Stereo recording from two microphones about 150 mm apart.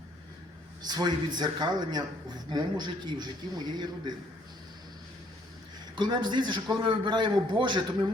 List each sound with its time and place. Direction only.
0.9 s speech: 25° right (ahead or behind)
6.0 s a man's voice: 30° right (ahead or behind)